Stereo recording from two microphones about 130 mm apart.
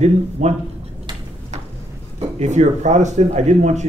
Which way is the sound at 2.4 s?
65° right (ahead or behind).